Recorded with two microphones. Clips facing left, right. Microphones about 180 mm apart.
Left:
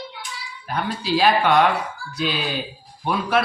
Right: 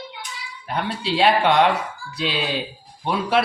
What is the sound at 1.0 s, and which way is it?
Speech, 25° right (ahead or behind).